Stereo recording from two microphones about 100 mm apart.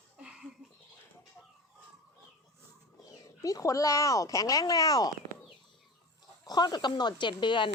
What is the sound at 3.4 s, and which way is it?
Speech, 35° left (ahead or behind).